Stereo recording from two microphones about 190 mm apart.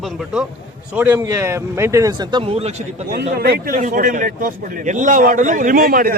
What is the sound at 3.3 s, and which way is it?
A man's voice, 55° right (ahead or behind).